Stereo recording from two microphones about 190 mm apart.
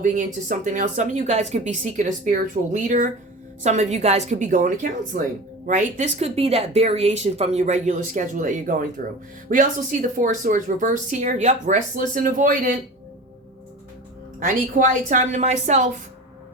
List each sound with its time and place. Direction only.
0.0 s speech: 45° right (ahead or behind)
14.3 s speech: 40° right (ahead or behind)